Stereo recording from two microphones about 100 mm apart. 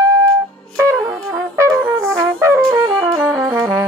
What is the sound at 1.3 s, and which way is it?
Brass instrument, 30° right (ahead or behind).